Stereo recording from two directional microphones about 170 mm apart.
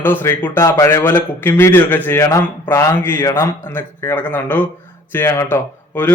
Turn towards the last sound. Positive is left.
turn(degrees=10)  # may be behind; listen again after turning